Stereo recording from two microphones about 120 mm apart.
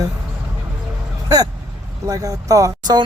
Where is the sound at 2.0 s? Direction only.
25° right (ahead or behind).